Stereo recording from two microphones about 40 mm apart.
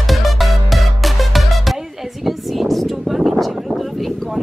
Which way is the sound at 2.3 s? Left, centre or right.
Centre.